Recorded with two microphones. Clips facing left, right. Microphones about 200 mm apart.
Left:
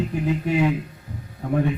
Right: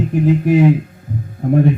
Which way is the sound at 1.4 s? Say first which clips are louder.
Right 8 dB; 50° right (ahead or behind).